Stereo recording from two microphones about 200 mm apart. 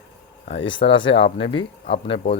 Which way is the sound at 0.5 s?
65° left (ahead or behind).